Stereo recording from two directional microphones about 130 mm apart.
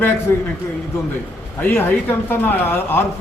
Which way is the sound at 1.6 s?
15° left (ahead or behind).